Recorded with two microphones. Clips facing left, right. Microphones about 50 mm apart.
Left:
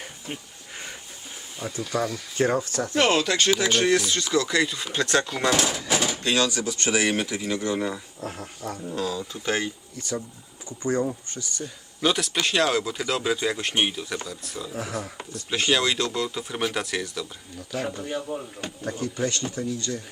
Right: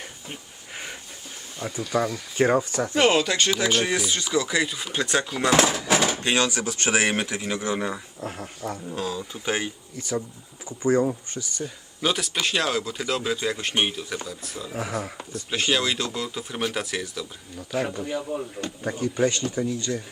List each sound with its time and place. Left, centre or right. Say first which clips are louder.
1.8 s speech: right 2 dB; centre
2.9 s speech: right 1 dB; centre
5.9 s speech: right 2 dB; right
7.5 s speech: left 1 dB; centre
8.2 s speech: right 1 dB; centre
9.0 s speech: left 4 dB; centre
18.3 s speech: right 2 dB; left
18.8 s speech: right 4 dB; centre